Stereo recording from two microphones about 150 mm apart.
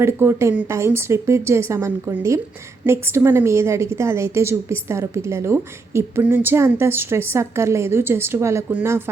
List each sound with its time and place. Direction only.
0.0 s a woman's voice: 15° right (ahead or behind)